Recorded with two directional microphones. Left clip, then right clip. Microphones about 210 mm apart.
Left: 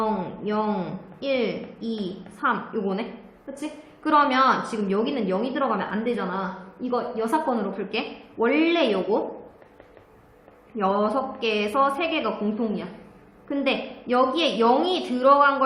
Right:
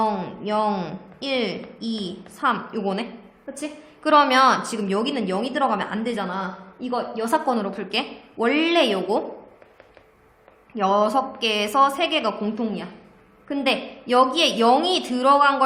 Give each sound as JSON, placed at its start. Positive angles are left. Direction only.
{"t": 0.0, "sound": "a woman's voice", "side_deg": -45}
{"t": 10.8, "sound": "a woman's voice", "side_deg": -45}